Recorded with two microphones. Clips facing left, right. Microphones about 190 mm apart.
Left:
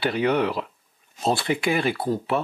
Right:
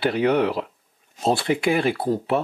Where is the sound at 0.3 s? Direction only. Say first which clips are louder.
Right 2 dB; 30° right (ahead or behind).